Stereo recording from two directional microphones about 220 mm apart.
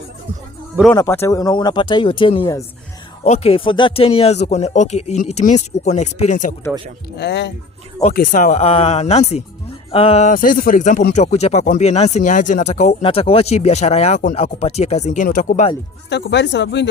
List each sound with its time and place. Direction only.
0.9 s speech: 10° left (ahead or behind)
3.2 s speech: 30° left (ahead or behind)
7.2 s speech: 50° left (ahead or behind)
8.1 s speech: 35° left (ahead or behind)
16.0 s speech: 50° left (ahead or behind)